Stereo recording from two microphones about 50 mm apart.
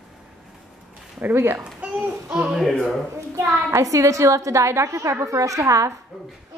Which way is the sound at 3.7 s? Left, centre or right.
Right.